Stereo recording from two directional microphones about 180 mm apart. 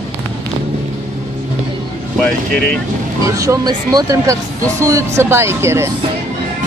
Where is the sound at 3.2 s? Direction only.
20° right (ahead or behind).